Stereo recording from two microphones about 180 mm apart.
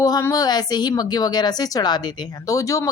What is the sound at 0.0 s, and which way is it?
A woman's voice, 15° left (ahead or behind).